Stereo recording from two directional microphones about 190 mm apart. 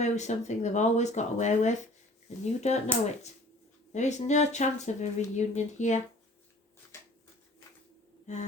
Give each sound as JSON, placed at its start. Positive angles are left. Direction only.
{"t": 0.0, "sound": "speech", "side_deg": 35}
{"t": 3.9, "sound": "speech", "side_deg": 40}